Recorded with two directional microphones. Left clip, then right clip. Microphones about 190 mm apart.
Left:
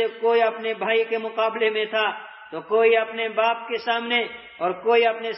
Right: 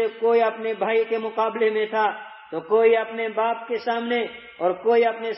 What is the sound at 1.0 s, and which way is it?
Speech, centre (ahead or behind).